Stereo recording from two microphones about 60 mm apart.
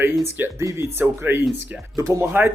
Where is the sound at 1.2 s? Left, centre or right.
Right.